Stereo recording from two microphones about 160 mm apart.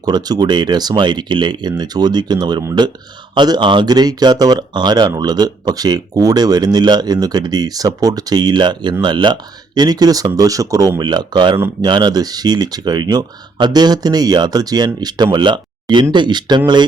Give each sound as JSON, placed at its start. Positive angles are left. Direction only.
{"t": 0.0, "sound": "speech", "side_deg": -25}